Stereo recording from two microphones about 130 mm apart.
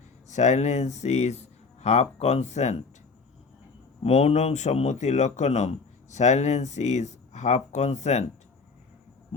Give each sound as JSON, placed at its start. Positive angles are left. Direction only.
{"t": 0.3, "sound": "speech", "side_deg": 65}
{"t": 4.0, "sound": "speech", "side_deg": 55}